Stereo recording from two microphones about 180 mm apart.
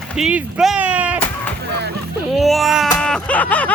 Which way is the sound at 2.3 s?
Centre (ahead or behind).